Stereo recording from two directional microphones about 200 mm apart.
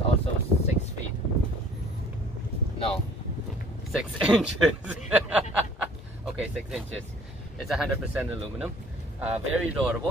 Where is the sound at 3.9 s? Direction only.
Centre (ahead or behind).